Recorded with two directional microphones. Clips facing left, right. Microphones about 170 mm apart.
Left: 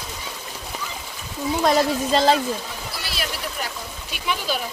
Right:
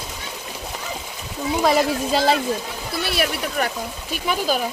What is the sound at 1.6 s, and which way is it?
Speech, 5° right (ahead or behind).